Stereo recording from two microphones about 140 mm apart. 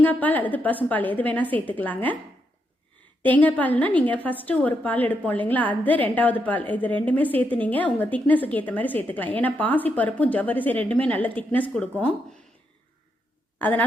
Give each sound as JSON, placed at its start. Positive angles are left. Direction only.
{"t": 0.0, "sound": "a woman's voice", "side_deg": 10}
{"t": 3.2, "sound": "a woman's voice", "side_deg": 10}
{"t": 13.6, "sound": "a woman's voice", "side_deg": 15}